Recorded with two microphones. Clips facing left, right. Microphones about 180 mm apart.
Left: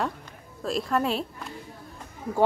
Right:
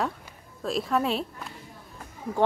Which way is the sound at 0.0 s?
Centre (ahead or behind).